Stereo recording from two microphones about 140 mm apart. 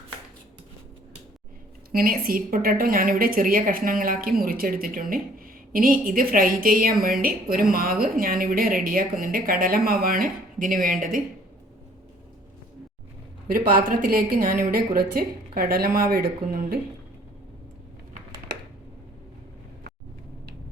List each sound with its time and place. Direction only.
1.9 s speech: 90° right
13.5 s speech: 90° right